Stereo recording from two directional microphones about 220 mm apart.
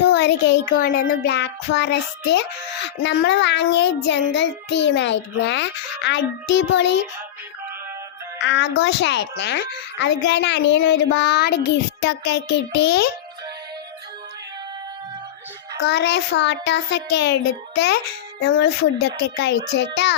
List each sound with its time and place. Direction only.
0.0 s a sound: 50° left (ahead or behind)
1.2 s music: 50° left (ahead or behind)
8.4 s music: 55° left (ahead or behind)
15.8 s music: 50° left (ahead or behind)